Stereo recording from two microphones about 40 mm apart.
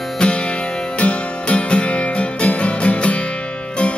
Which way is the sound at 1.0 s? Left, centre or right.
Left.